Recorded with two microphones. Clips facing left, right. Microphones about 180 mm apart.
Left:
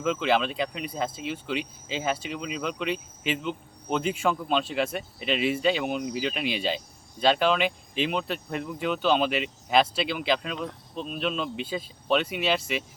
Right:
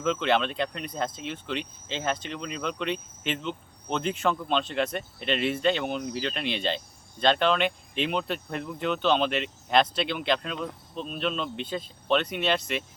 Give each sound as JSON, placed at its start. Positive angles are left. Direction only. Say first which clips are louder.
{"t": 0.0, "sound": "speech", "louder": "even", "side_deg": 5}